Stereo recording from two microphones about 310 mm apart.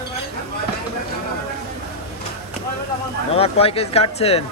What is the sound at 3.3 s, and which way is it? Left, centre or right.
Speech, centre.